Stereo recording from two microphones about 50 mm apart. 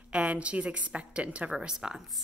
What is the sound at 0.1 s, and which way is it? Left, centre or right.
A woman's voice, right.